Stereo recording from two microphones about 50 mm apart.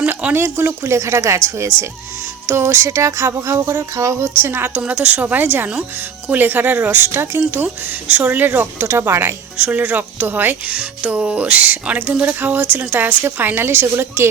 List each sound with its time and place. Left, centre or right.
0.3 s a woman's voice: right
4.4 s a woman's voice: right
4.8 s speech: right
8.0 s speech: right
8.9 s speech: right
9.6 s a woman's voice: right